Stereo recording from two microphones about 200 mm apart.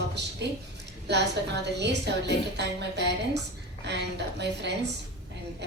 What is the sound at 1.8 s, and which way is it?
Speech, 60° right (ahead or behind).